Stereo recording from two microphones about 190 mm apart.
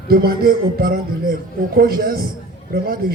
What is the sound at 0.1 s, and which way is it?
A man's voice, 50° right (ahead or behind).